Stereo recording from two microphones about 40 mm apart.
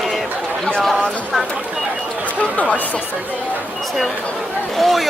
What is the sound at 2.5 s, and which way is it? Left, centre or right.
Speech, left.